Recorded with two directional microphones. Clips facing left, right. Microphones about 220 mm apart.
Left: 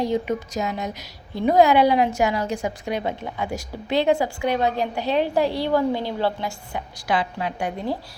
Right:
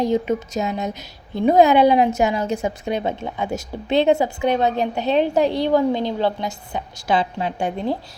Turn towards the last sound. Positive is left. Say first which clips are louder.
# right 3 dB
turn(degrees=-25)  # may be behind; listen again after turning